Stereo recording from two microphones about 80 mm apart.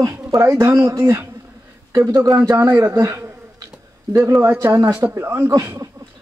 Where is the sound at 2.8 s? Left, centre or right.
Right.